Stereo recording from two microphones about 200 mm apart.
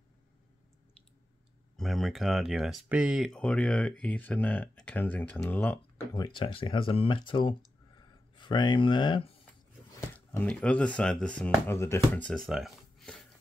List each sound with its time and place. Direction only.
1.8 s speech: centre (ahead or behind)
6.1 s speech: 25° left (ahead or behind)
9.9 s speech: 10° left (ahead or behind)